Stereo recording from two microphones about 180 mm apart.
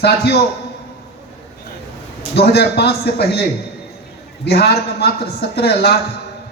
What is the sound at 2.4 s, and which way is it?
A man's voice, 65° left (ahead or behind).